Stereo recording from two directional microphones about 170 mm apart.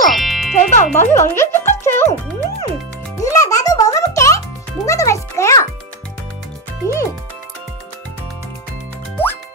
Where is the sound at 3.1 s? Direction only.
20° left (ahead or behind).